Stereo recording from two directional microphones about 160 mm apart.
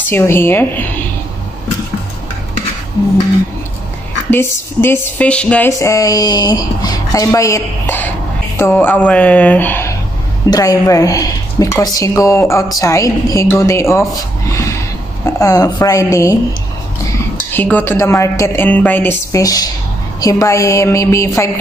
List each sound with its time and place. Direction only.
0.1 s a woman's voice: 15° left (ahead or behind)
4.3 s a woman's voice: 15° left (ahead or behind)
5.7 s a woman's voice: 20° left (ahead or behind)
17.5 s a woman's voice: 10° left (ahead or behind)